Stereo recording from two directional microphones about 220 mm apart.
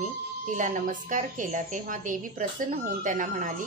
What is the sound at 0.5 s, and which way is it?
Speech, 35° right (ahead or behind).